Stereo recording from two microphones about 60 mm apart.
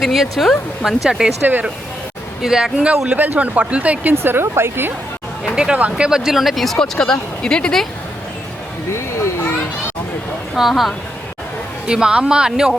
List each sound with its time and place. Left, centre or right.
0.0 s speech: centre
1.4 s a woman's voice: right
2.4 s speech: centre
3.1 s speech: right
4.1 s a woman's voice: right
5.5 s speech: centre
8.9 s a sound: left
10.5 s speech: centre
11.9 s speech: centre